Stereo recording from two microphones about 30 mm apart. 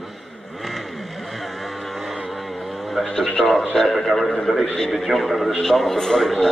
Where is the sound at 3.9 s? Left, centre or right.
Centre.